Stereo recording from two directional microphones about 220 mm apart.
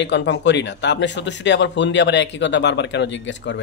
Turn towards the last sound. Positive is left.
turn(degrees=55)  # may be behind; listen again after turning